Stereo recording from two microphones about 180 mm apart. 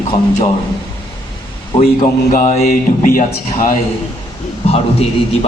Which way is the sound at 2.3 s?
40° left (ahead or behind).